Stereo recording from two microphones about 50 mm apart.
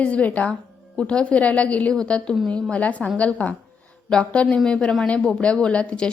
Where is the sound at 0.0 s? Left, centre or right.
Left.